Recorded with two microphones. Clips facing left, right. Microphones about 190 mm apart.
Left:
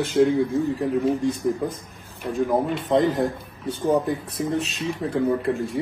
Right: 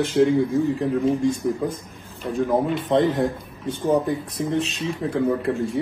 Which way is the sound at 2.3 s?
Centre (ahead or behind).